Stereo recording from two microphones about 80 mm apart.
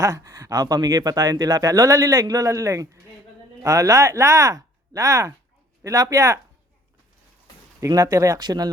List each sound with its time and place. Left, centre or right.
0.0 s speech: right
7.8 s speech: right
8.4 s speech: right